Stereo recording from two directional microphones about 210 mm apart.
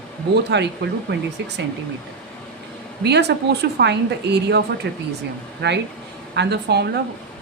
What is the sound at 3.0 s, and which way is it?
Speech, 50° right (ahead or behind).